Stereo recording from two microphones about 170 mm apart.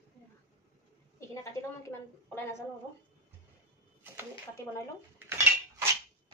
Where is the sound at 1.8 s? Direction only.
15° left (ahead or behind).